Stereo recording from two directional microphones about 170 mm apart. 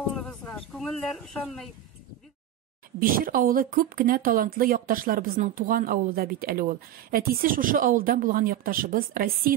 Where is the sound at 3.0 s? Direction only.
55° right (ahead or behind).